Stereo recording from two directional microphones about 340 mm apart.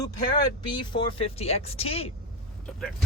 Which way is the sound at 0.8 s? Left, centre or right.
Centre.